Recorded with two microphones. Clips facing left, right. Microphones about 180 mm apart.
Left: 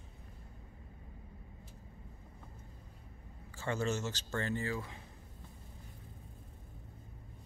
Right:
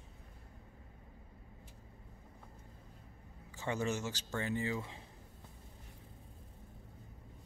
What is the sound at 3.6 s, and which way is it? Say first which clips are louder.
Speech: left 1 dB; 15° right (ahead or behind).